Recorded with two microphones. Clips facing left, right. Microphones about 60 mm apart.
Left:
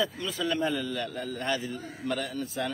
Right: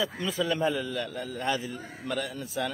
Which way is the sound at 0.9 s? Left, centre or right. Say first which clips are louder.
Even; centre.